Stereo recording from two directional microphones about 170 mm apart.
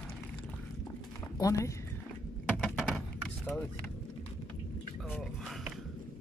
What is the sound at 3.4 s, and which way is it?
Vehicle, 10° left (ahead or behind).